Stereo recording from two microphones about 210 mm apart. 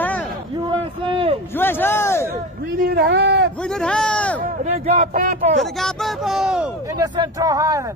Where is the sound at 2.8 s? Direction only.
50° right (ahead or behind).